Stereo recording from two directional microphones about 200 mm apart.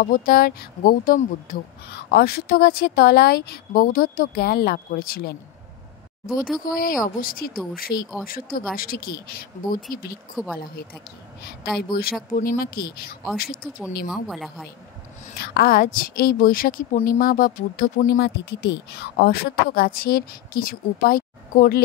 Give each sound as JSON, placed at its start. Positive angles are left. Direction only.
{"t": 0.0, "sound": "a woman's voice", "side_deg": 45}
{"t": 6.6, "sound": "a woman's voice", "side_deg": 45}
{"t": 10.3, "sound": "a woman's voice", "side_deg": 0}
{"t": 11.9, "sound": "a woman's voice", "side_deg": 50}
{"t": 14.1, "sound": "a woman's voice", "side_deg": 0}
{"t": 15.3, "sound": "a woman's voice", "side_deg": 55}